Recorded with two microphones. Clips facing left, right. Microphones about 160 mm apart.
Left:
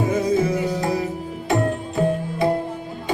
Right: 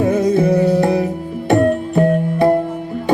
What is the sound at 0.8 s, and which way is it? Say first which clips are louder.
Music: right 7 dB; 60° right (ahead or behind).